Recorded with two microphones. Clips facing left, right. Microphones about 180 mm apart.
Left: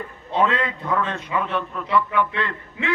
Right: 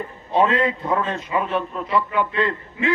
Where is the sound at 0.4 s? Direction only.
25° right (ahead or behind).